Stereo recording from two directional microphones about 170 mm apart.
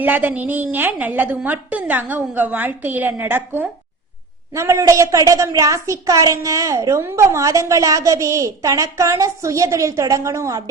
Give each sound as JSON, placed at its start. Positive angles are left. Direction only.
{"t": 0.0, "sound": "a woman's voice", "side_deg": -10}